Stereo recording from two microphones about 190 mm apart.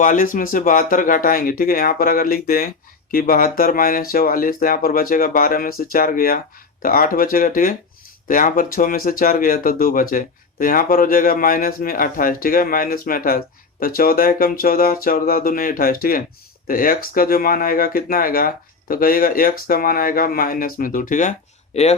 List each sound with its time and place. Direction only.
0.0 s speech: 45° left (ahead or behind)